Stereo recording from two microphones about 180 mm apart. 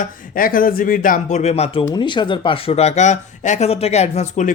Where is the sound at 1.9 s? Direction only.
25° left (ahead or behind).